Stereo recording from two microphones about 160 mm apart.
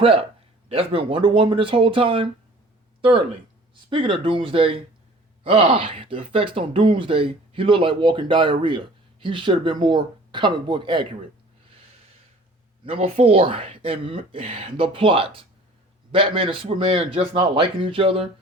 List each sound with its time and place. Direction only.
0.0 s speech: 35° right (ahead or behind)
12.8 s speech: 35° right (ahead or behind)